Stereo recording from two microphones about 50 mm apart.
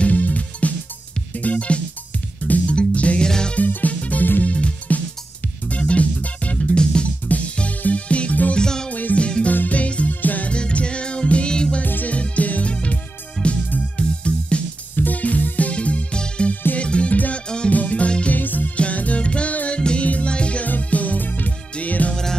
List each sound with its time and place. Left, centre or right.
0.0 s music: left
3.3 s music: centre
3.5 s music: left
8.6 s music: centre
8.9 s music: left
11.8 s music: left
15.0 s music: left
18.4 s music: left
20.6 s music: left